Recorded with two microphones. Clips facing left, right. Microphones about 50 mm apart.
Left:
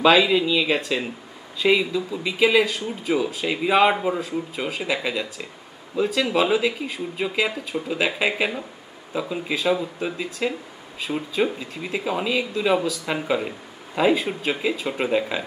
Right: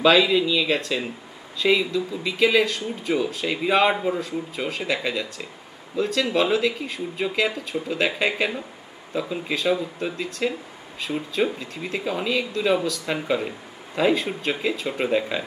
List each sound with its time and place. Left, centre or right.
0.0 s speech: centre